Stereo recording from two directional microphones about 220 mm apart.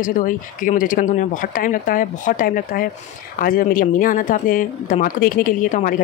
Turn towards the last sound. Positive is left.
turn(degrees=35)  # may be behind; listen again after turning